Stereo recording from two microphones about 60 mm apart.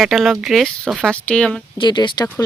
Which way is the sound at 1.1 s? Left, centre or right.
Centre.